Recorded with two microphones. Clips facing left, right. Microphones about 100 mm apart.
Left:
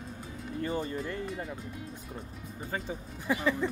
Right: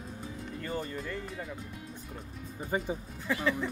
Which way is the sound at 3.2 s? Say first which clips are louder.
Left 1 dB; 15° left (ahead or behind).